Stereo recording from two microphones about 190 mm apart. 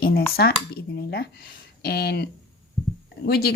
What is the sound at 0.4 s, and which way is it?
Speech, 60° left (ahead or behind).